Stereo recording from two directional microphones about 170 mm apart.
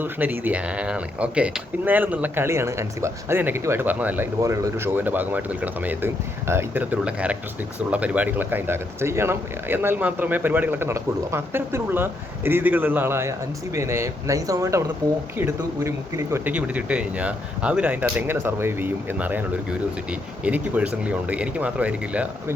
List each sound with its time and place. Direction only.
0.0 s speech: 10° right (ahead or behind)